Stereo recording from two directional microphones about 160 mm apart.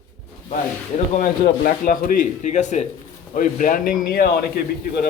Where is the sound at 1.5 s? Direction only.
65° left (ahead or behind).